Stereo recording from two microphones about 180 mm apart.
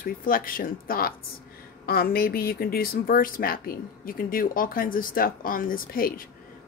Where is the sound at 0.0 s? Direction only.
50° left (ahead or behind).